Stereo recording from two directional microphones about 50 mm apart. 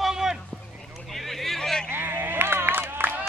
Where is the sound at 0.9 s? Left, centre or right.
Centre.